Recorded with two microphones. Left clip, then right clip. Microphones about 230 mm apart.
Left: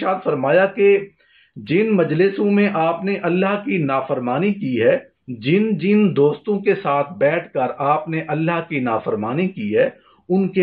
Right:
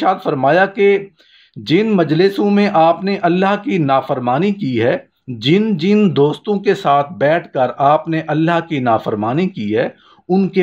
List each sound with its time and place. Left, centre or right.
0.0 s speech: right